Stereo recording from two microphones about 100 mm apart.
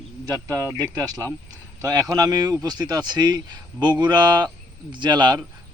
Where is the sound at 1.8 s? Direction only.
35° right (ahead or behind).